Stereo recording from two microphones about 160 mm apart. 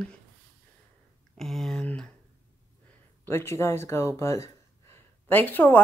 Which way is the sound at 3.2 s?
15° left (ahead or behind).